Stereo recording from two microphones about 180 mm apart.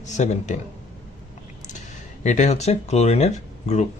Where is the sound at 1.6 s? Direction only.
40° left (ahead or behind).